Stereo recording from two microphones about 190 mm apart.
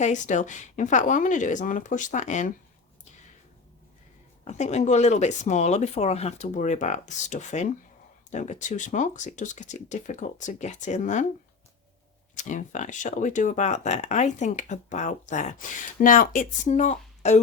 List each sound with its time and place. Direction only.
0.0 s speech: 40° left (ahead or behind)
4.4 s speech: 35° left (ahead or behind)
12.3 s speech: 40° left (ahead or behind)